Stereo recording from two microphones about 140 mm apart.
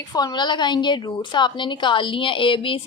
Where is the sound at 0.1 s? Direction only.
30° left (ahead or behind).